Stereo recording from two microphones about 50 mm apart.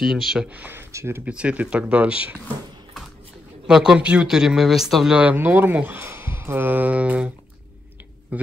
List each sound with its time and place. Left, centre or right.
0.0 s speech: centre
0.9 s speech: right
1.2 s speech: right
3.6 s speech: centre
4.0 s speech: right
4.3 s speech: centre
5.3 s speech: right
6.0 s a sound: right
6.6 s speech: right